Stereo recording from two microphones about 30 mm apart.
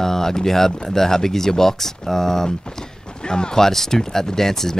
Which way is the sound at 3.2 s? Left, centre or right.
Left.